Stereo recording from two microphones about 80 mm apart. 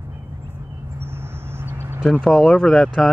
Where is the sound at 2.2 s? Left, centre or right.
Centre.